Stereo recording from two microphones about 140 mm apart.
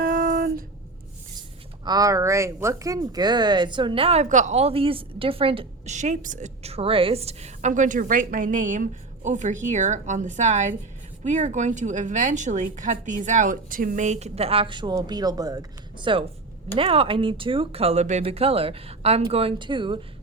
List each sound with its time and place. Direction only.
0.0 s music: 70° right (ahead or behind)
1.8 s a woman's voice: 25° right (ahead or behind)
5.9 s a woman's voice: 60° right (ahead or behind)
6.6 s a woman's voice: 45° right (ahead or behind)